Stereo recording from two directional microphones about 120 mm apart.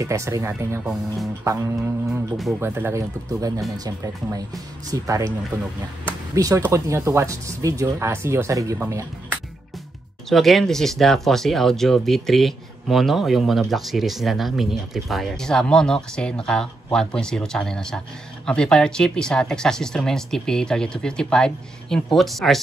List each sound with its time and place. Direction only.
0.0 s speech: 25° right (ahead or behind)
8.7 s speech: 15° right (ahead or behind)
10.3 s speech: centre (ahead or behind)